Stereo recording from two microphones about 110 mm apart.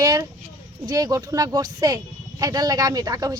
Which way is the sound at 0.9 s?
35° right (ahead or behind).